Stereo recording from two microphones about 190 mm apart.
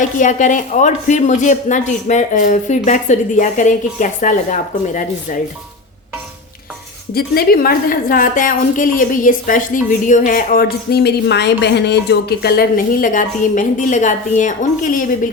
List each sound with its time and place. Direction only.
0.0 s speech: 40° left (ahead or behind)
7.1 s a woman's voice: 50° left (ahead or behind)